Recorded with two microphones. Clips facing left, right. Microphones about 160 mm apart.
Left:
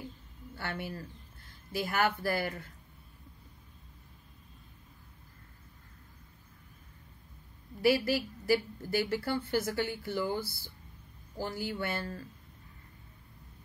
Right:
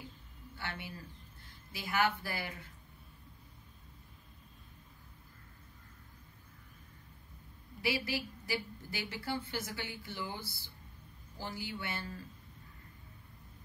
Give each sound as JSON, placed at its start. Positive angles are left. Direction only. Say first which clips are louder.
{"t": 0.6, "sound": "a woman's voice", "louder": "left 6 dB", "side_deg": 45}
{"t": 7.8, "sound": "a woman's voice", "louder": "left 9 dB", "side_deg": 45}